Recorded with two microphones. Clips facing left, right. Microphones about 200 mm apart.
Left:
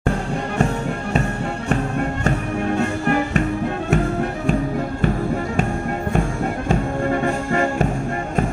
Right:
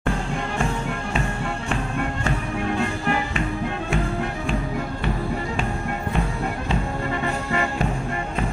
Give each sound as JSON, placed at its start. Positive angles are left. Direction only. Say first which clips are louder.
{"t": 1.7, "sound": "music", "louder": "left 6 dB", "side_deg": 40}
{"t": 6.7, "sound": "music", "louder": "left 8 dB", "side_deg": 50}